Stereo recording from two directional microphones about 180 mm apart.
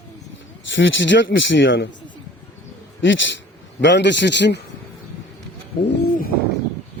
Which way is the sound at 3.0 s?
90° left.